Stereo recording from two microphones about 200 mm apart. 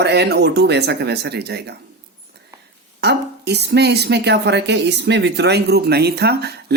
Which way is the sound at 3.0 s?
55° right (ahead or behind).